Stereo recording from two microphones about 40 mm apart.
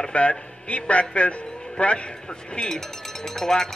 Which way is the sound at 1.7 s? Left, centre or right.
Left.